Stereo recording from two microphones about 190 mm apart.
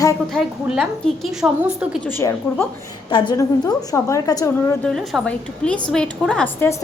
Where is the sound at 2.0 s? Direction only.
10° left (ahead or behind).